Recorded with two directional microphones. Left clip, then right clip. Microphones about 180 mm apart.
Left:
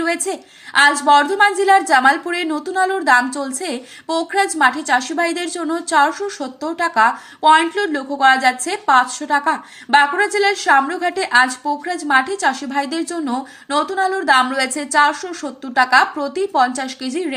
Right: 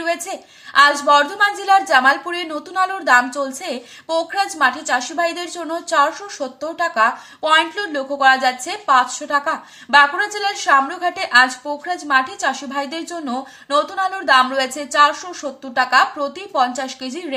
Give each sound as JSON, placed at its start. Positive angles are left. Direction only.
{"t": 0.0, "sound": "a woman's voice", "side_deg": 25}